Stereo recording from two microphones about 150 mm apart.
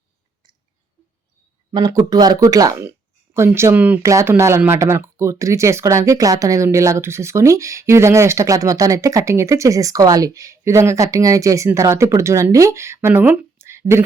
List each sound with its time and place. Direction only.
1.7 s speech: 25° right (ahead or behind)